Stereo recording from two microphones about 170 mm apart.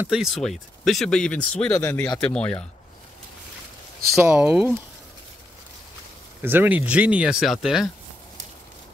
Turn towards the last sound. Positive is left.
turn(degrees=0)  # may be behind; listen again after turning